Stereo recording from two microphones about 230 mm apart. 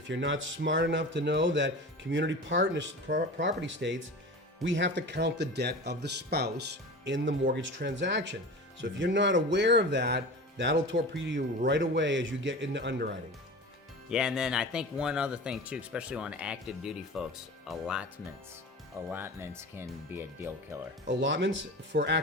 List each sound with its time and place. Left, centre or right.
0.1 s a man's voice: right
14.1 s speech: centre
19.1 s speech: centre
21.1 s a man's voice: right